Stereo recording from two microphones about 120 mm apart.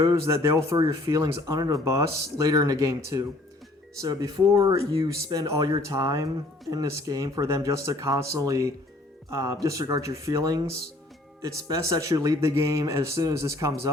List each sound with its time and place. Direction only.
0.0 s speech: 30° right (ahead or behind)